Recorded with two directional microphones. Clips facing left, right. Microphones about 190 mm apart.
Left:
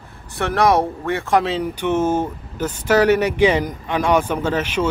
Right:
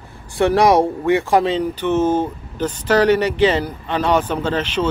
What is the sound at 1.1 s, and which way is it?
Speech, 15° right (ahead or behind).